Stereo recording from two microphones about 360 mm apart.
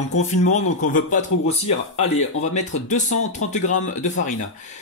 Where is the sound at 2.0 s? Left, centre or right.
Centre.